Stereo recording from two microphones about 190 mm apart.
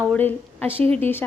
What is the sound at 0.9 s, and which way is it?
Speech, 10° left (ahead or behind).